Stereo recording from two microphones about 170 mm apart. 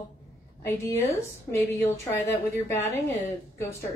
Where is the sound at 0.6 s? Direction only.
15° left (ahead or behind).